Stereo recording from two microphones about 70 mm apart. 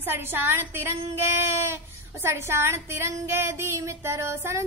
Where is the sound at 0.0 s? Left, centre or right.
Right.